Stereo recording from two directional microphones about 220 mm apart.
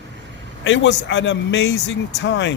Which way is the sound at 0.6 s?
60° left (ahead or behind).